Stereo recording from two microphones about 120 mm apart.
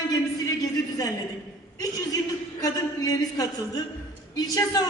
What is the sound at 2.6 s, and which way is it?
A woman's voice, 30° left (ahead or behind).